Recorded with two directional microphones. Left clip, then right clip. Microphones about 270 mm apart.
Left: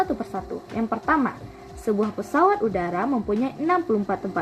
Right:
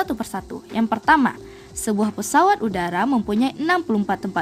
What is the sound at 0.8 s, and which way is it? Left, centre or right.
Speech, right.